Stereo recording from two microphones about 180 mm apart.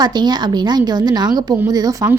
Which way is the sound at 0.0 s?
25° right (ahead or behind).